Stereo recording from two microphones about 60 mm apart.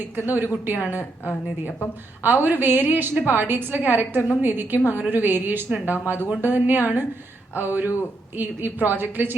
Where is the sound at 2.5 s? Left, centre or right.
Right.